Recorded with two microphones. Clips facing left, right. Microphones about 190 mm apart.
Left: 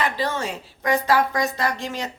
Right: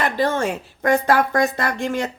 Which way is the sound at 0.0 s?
50° right (ahead or behind).